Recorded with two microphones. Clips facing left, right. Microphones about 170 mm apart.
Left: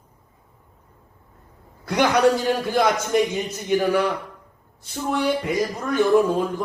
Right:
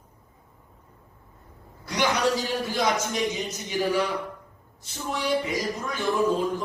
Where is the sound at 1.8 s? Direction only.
55° left (ahead or behind).